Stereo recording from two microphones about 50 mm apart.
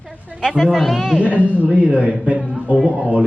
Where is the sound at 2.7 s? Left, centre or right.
Centre.